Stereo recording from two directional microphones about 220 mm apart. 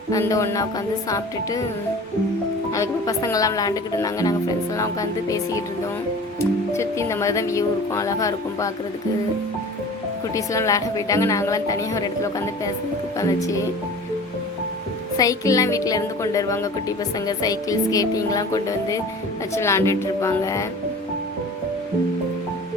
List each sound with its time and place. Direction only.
0.1 s speech: 15° left (ahead or behind)
2.7 s speech: 15° left (ahead or behind)
10.3 s speech: 15° left (ahead or behind)
15.2 s speech: 15° left (ahead or behind)